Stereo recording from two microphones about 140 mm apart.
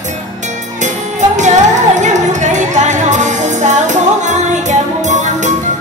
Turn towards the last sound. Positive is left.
turn(degrees=-60)  # may be behind; listen again after turning